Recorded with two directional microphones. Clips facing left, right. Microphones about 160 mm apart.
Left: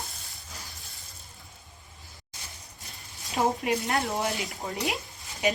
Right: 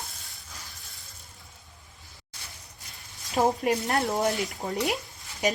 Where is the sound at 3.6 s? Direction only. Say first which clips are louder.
Right 2 dB; 45° right (ahead or behind).